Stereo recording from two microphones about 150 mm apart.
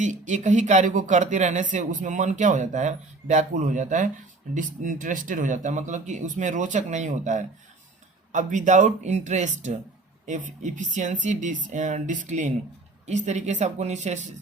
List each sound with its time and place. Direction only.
0.0 s speech: 55° right (ahead or behind)